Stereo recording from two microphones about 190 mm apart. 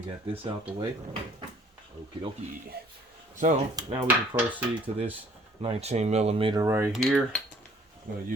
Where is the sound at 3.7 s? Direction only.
25° right (ahead or behind).